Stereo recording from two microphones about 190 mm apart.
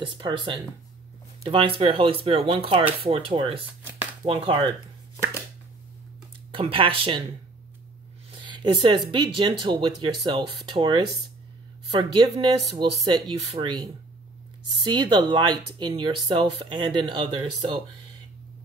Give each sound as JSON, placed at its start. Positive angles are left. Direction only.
{"t": 0.0, "sound": "speech", "side_deg": -25}
{"t": 6.5, "sound": "speech", "side_deg": -25}
{"t": 8.3, "sound": "a sound", "side_deg": -25}
{"t": 9.1, "sound": "speech", "side_deg": -25}